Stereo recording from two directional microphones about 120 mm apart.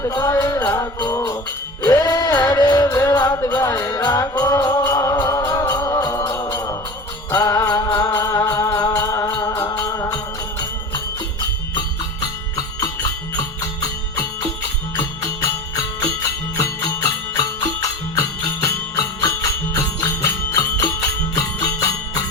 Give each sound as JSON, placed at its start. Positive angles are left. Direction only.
{"t": 0.0, "sound": "music", "side_deg": 30}
{"t": 12.5, "sound": "music", "side_deg": 30}
{"t": 16.6, "sound": "music", "side_deg": 30}
{"t": 20.0, "sound": "jingle bell", "side_deg": 25}